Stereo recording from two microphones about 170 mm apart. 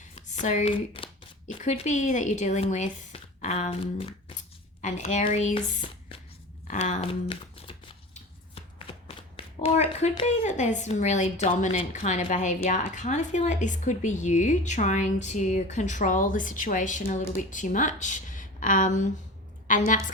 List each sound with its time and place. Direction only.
0.2 s a sound: 45° left (ahead or behind)
1.5 s a woman's voice: 40° left (ahead or behind)
7.1 s shuffling cards: 30° left (ahead or behind)
10.2 s a woman's voice: 45° left (ahead or behind)